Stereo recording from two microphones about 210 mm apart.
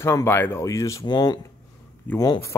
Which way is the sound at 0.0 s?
10° left (ahead or behind).